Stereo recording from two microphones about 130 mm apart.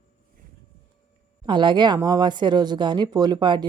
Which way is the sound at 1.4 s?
35° right (ahead or behind).